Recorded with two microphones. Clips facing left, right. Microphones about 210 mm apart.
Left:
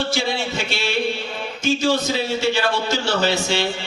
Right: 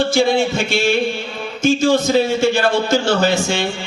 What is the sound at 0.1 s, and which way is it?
A man's voice, 50° right (ahead or behind).